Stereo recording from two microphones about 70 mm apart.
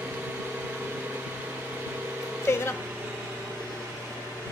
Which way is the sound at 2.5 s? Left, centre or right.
Left.